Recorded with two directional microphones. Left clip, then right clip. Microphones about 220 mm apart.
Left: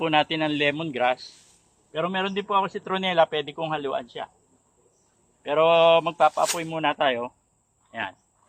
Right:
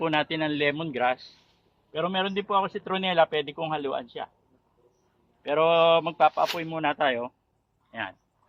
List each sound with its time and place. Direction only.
0.0 s a man's voice: 25° left (ahead or behind)
5.4 s a man's voice: 15° left (ahead or behind)